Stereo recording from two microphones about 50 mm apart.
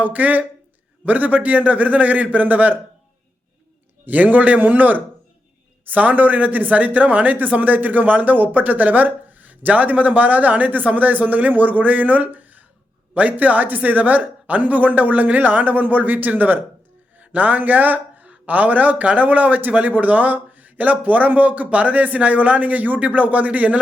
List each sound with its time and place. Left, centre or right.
0.0 s speech: right
4.0 s speech: right